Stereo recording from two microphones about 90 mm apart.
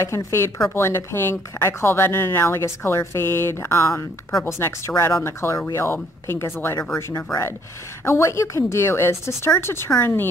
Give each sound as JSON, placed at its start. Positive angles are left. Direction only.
{"t": 0.0, "sound": "a woman's voice", "side_deg": 30}